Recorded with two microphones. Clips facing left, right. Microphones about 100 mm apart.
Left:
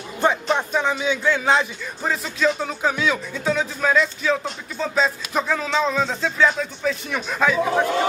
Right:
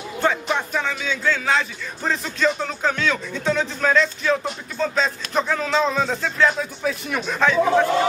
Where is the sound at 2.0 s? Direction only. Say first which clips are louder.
Even; 5° left (ahead or behind).